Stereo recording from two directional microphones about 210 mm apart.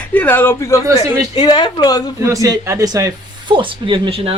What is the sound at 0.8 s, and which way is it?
Speech, 15° right (ahead or behind).